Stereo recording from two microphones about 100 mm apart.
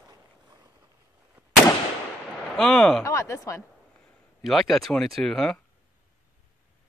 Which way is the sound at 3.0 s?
30° left (ahead or behind).